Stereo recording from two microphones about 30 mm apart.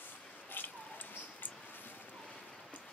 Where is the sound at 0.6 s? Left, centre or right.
Left.